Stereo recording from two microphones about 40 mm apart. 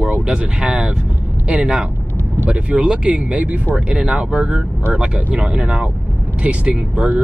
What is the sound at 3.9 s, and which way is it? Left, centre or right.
Speech, right.